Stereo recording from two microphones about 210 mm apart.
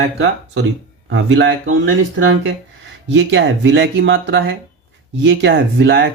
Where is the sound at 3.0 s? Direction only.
60° right (ahead or behind).